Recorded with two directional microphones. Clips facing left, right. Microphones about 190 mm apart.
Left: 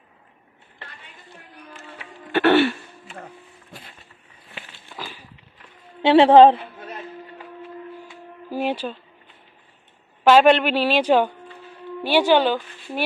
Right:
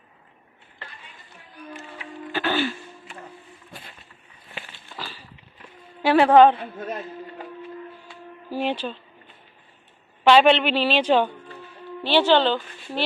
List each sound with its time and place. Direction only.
2.3 s throat clearing: 65° left (ahead or behind)
4.9 s a sound: 15° left (ahead or behind)
6.0 s a woman's voice: 25° left (ahead or behind)
8.5 s speech: 10° left (ahead or behind)
10.2 s speech: 5° left (ahead or behind)